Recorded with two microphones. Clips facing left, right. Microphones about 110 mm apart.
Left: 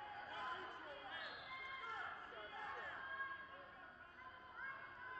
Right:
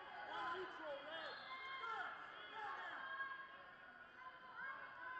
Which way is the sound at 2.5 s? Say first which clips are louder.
Right 2 dB; centre (ahead or behind).